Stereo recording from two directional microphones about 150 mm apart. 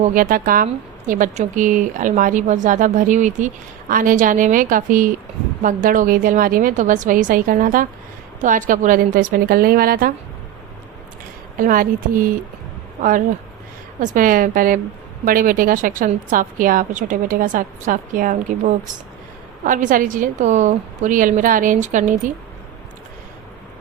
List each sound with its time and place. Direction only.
0.0 s a woman's voice: 65° right (ahead or behind)
11.6 s a woman's voice: 65° right (ahead or behind)